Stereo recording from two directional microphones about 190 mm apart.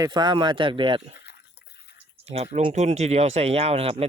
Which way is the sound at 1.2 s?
60° left (ahead or behind).